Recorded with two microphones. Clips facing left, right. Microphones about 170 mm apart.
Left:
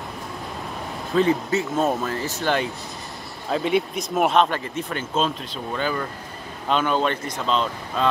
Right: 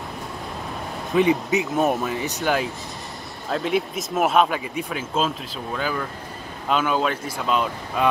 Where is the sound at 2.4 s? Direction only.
5° right (ahead or behind).